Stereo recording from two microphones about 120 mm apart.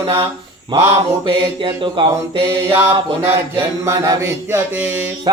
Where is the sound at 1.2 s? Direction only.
45° right (ahead or behind).